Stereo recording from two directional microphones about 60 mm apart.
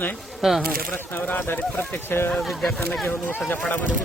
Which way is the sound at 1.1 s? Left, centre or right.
Left.